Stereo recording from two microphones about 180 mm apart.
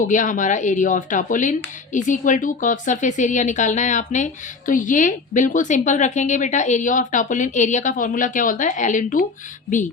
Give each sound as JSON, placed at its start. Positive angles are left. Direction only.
{"t": 0.0, "sound": "speech", "side_deg": 45}